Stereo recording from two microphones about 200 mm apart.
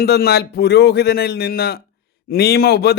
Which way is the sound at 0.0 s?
50° left (ahead or behind).